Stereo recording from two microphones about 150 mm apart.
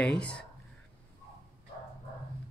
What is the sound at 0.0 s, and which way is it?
Speech, 5° left (ahead or behind).